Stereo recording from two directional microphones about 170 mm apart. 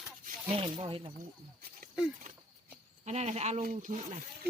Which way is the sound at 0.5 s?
30° right (ahead or behind).